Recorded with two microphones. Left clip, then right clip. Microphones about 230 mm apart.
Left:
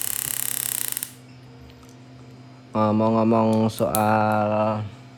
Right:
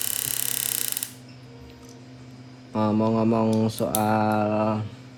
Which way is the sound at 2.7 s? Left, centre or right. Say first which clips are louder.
Left 3 dB; left.